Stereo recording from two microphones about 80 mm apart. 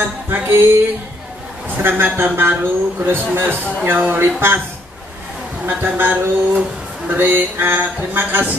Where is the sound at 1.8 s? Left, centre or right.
Right.